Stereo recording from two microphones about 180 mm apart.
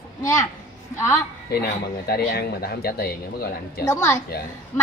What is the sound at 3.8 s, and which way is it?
Speech, 15° left (ahead or behind).